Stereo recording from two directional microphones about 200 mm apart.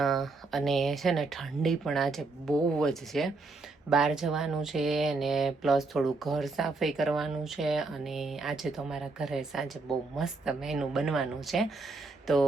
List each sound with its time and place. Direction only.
0.0 s speech: centre (ahead or behind)